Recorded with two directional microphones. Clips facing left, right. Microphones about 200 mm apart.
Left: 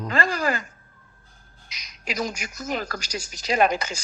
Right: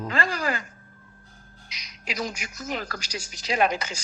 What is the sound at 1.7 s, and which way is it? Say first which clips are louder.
A woman's voice: left 3 dB; 45° left (ahead or behind).